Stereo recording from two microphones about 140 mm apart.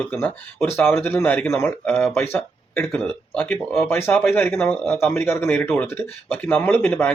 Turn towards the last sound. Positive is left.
turn(degrees=5)  # may be behind; listen again after turning